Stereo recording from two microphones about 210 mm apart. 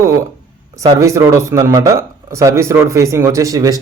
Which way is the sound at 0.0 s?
15° right (ahead or behind).